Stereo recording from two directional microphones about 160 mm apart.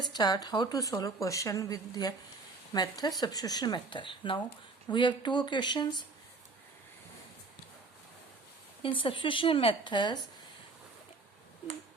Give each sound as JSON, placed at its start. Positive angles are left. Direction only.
{"t": 0.1, "sound": "a woman's voice", "side_deg": 25}
{"t": 8.8, "sound": "a woman's voice", "side_deg": 35}